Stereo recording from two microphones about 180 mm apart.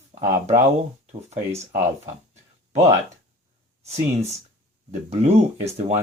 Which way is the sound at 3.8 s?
35° right (ahead or behind).